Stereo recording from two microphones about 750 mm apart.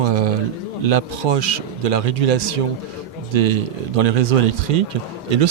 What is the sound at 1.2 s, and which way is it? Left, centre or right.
Speech, right.